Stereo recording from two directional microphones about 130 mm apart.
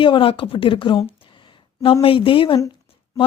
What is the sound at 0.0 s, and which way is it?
Speech, 40° left (ahead or behind).